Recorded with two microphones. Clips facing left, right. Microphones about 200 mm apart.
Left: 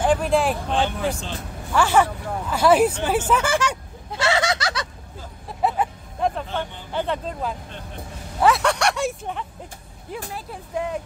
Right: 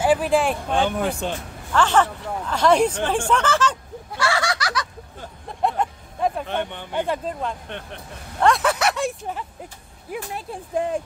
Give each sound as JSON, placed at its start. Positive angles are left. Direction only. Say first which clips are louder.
{"t": 0.0, "sound": "speech", "louder": "right 1 dB", "side_deg": -5}
{"t": 0.7, "sound": "speech", "louder": "right 2 dB", "side_deg": -50}
{"t": 1.7, "sound": "speech", "louder": "even", "side_deg": 10}
{"t": 4.1, "sound": "snicker", "louder": "left 2 dB", "side_deg": 20}
{"t": 5.5, "sound": "vehicle", "louder": "even", "side_deg": 5}
{"t": 6.4, "sound": "speech", "louder": "right 2 dB", "side_deg": -65}
{"t": 6.9, "sound": "speech", "louder": "even", "side_deg": -10}
{"t": 7.7, "sound": "speech", "louder": "right 4 dB", "side_deg": -70}
{"t": 8.4, "sound": "speech", "louder": "even", "side_deg": 5}